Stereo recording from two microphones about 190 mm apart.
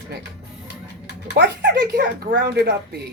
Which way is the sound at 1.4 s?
60° right (ahead or behind).